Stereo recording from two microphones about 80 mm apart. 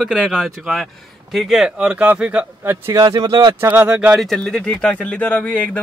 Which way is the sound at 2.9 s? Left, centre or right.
Right.